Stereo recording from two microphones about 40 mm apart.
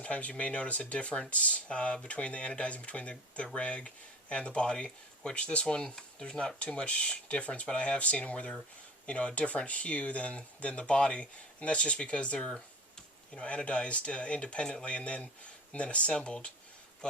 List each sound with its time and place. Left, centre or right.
0.0 s speech: left; by 6.2 s centre
6.2 s speech: left
12.5 s a sound: centre
13.3 s speech: left